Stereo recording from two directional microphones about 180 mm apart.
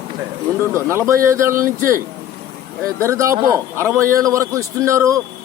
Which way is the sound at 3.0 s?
15° right (ahead or behind).